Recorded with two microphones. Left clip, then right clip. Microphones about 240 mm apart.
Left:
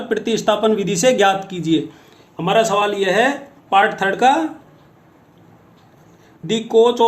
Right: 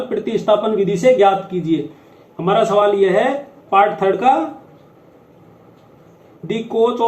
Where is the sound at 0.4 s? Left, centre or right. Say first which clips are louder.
Right 2 dB; left.